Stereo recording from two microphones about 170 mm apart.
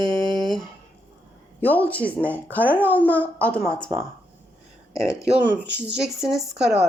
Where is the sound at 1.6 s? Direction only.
10° left (ahead or behind).